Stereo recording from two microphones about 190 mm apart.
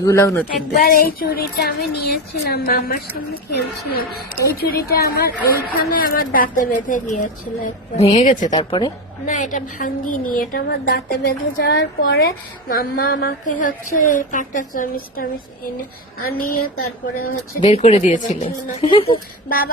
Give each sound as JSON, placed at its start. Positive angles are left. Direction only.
{"t": 0.0, "sound": "speech", "side_deg": 15}
{"t": 0.7, "sound": "a woman's voice", "side_deg": 50}
{"t": 8.4, "sound": "a woman's voice", "side_deg": 20}
{"t": 9.2, "sound": "a woman's voice", "side_deg": 45}
{"t": 17.6, "sound": "speech", "side_deg": 35}
{"t": 18.9, "sound": "a woman's voice", "side_deg": 30}
{"t": 19.5, "sound": "a woman's voice", "side_deg": 50}